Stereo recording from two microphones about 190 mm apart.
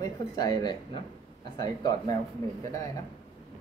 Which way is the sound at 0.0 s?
20° left (ahead or behind).